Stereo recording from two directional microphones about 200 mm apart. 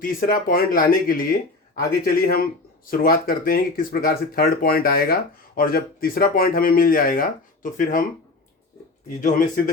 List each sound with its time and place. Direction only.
0.0 s speech: 45° left (ahead or behind)